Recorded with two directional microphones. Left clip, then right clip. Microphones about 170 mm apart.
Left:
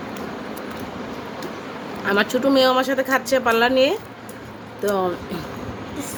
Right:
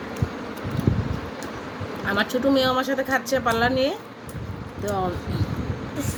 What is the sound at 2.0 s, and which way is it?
A woman's voice, 30° left (ahead or behind).